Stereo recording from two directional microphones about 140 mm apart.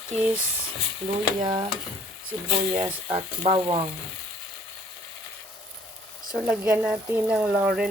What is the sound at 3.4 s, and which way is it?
Frying, 35° right (ahead or behind).